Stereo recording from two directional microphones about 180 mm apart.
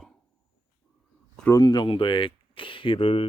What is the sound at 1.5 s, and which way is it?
Speech, 20° left (ahead or behind).